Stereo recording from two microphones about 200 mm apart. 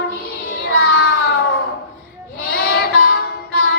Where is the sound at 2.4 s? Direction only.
50° left (ahead or behind).